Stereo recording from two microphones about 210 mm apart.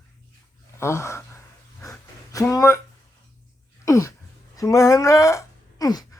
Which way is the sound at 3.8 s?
15° left (ahead or behind).